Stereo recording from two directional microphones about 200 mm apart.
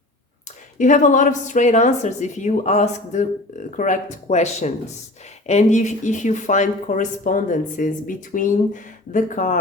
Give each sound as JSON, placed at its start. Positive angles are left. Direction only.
{"t": 0.8, "sound": "speech", "side_deg": 40}